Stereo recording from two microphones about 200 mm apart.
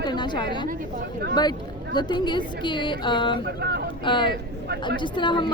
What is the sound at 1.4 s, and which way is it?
A woman's voice, 20° left (ahead or behind).